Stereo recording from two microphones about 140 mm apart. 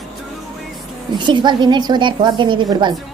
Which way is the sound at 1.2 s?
35° right (ahead or behind).